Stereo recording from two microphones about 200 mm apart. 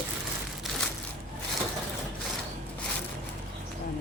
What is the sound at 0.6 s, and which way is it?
Crushing, centre (ahead or behind).